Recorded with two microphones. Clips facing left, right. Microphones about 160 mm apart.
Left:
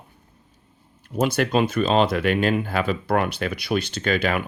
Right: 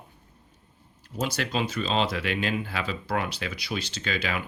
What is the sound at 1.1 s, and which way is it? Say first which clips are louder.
Speech: left 8 dB; 55° left (ahead or behind).